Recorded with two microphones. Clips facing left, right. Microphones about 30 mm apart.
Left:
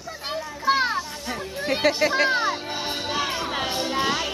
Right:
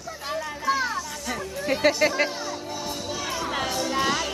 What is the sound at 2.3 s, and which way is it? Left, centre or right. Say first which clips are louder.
Music: left 8 dB; left.